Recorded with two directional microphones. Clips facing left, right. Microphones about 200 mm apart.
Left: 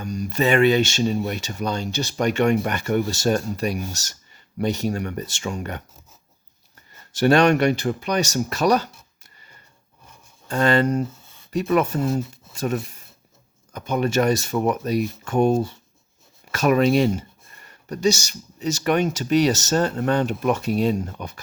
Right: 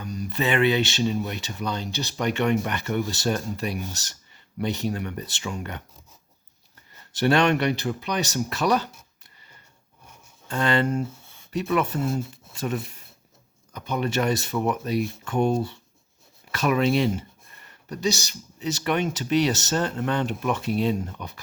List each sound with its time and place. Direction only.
0.0 s speech: 45° left (ahead or behind)
7.1 s speech: 45° left (ahead or behind)
10.5 s speech: 40° left (ahead or behind)
18.6 s speech: 45° left (ahead or behind)